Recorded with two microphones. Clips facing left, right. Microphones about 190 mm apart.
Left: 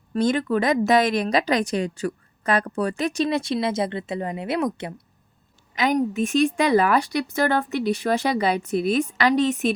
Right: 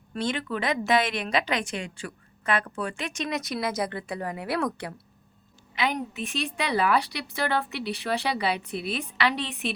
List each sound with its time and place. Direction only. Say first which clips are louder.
0.1 s a woman's voice: left 8 dB; 40° left (ahead or behind); by 4.9 s 20° left (ahead or behind)
5.7 s a woman's voice: left 8 dB; 45° left (ahead or behind)